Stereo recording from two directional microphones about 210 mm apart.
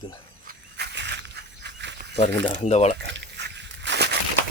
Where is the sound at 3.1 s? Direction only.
55° right (ahead or behind).